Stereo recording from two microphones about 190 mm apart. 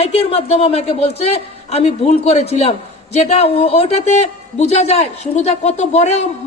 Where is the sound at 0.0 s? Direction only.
35° left (ahead or behind).